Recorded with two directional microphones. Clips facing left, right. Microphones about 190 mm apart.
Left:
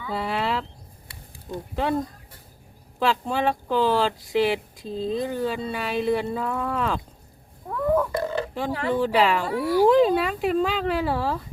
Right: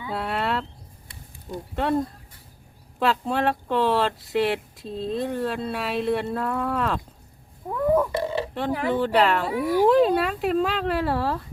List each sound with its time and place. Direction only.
0.1 s speech: centre (ahead or behind)
1.7 s speech: centre (ahead or behind)
7.7 s burping: 10° right (ahead or behind)
8.1 s burping: 25° right (ahead or behind)
8.9 s speech: centre (ahead or behind)
9.6 s speech: 15° right (ahead or behind)
9.8 s speech: centre (ahead or behind)